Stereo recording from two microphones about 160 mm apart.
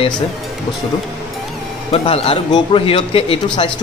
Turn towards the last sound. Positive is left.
turn(degrees=35)  # may be behind; listen again after turning